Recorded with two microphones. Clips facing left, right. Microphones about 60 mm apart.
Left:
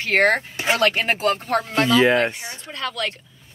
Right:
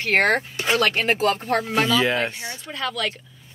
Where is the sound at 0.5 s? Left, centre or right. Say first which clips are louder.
Left 1 dB; left.